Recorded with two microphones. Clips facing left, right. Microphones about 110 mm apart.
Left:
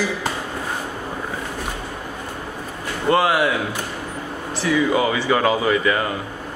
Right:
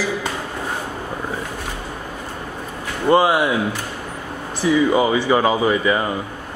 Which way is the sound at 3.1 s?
20° right (ahead or behind).